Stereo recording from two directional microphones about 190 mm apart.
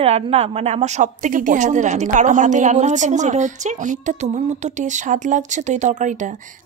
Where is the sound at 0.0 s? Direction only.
30° right (ahead or behind).